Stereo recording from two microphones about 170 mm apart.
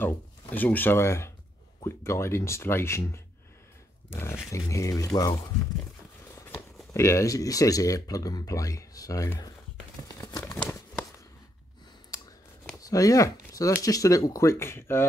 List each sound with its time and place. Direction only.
0.0 s speech: 10° left (ahead or behind)
10.0 s crumpling: 20° left (ahead or behind)
12.8 s speech: 20° left (ahead or behind)